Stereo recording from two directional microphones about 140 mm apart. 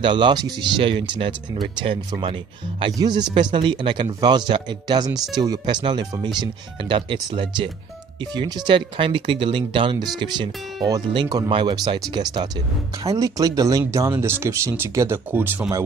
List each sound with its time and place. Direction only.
0.0 s speech: 35° right (ahead or behind); by 15.8 s 15° right (ahead or behind)